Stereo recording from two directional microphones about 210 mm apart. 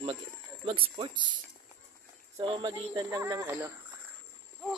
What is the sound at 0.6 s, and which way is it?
Speech, 25° right (ahead or behind).